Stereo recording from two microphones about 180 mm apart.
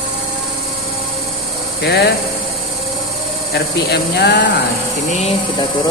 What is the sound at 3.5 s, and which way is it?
Speech, 70° left (ahead or behind).